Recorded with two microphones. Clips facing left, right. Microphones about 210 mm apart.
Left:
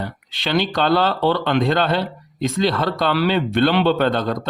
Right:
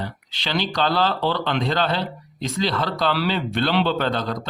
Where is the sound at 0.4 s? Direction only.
55° left (ahead or behind).